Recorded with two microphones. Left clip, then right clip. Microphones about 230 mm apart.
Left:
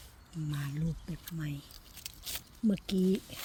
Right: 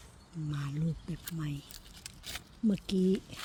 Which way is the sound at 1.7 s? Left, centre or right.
Left.